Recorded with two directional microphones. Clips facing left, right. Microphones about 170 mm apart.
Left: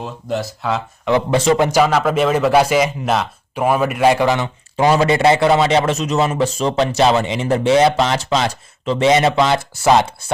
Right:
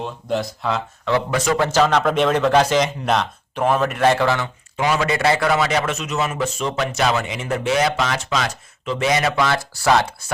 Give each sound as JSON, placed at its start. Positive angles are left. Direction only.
{"t": 0.0, "sound": "speech", "side_deg": 0}
{"t": 1.0, "sound": "speech", "side_deg": 15}
{"t": 4.8, "sound": "a man's voice", "side_deg": 35}